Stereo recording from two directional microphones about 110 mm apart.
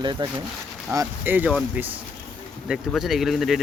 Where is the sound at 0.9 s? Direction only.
25° right (ahead or behind).